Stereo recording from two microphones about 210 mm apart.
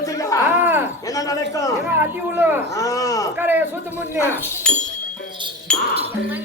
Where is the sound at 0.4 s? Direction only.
10° right (ahead or behind).